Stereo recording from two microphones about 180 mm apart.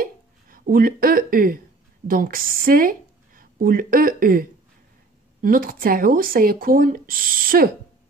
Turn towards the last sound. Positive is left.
turn(degrees=-50)  # may be behind; listen again after turning